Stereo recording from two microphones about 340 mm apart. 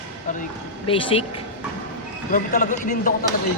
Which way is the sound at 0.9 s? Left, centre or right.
Centre.